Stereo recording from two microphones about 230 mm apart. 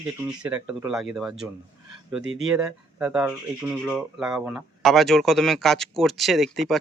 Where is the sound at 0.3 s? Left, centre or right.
Centre.